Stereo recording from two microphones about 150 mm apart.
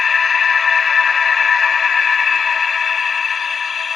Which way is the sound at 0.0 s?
Centre (ahead or behind).